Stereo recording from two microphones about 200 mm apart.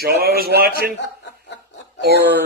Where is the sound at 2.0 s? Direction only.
55° right (ahead or behind).